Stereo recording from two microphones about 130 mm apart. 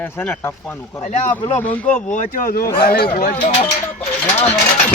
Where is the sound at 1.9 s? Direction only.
70° left (ahead or behind); by 2.7 s 90° left.